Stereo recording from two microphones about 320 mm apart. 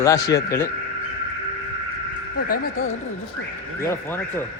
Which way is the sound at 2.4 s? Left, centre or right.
Left.